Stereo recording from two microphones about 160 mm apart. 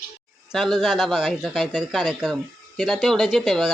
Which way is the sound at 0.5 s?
Centre (ahead or behind).